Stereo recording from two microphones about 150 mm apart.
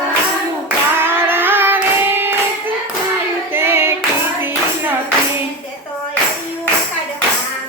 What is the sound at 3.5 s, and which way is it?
Hands, 15° right (ahead or behind).